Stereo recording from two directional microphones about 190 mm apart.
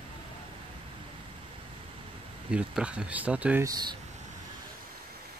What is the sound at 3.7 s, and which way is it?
Speech, 20° right (ahead or behind).